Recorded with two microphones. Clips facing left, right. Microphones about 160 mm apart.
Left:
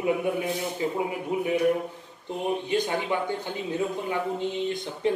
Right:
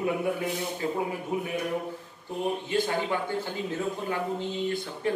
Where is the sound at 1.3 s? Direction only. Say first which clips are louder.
Left 3 dB; 15° left (ahead or behind).